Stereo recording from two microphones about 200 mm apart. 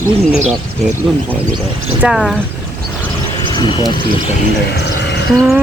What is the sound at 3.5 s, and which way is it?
Speech, 20° left (ahead or behind).